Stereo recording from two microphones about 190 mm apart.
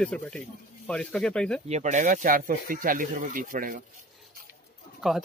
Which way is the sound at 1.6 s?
35° right (ahead or behind).